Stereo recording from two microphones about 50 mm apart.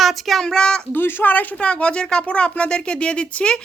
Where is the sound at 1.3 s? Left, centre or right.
Left.